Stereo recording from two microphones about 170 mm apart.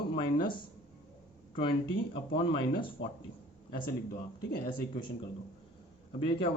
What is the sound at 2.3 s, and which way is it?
Speech, 30° left (ahead or behind).